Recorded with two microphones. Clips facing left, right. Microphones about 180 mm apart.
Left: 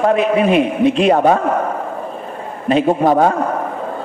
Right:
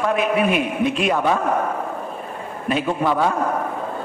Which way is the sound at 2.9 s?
45° left (ahead or behind).